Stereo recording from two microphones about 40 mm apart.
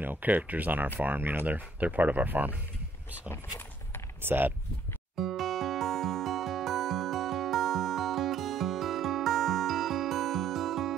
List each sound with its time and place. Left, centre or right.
0.0 s speech: right
3.3 s vehicle: left
4.2 s speech: right
5.1 s music: centre